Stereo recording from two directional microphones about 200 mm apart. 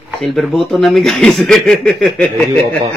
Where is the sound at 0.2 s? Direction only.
Centre (ahead or behind).